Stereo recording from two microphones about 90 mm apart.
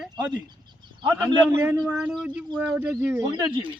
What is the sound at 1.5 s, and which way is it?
Speech, 30° right (ahead or behind).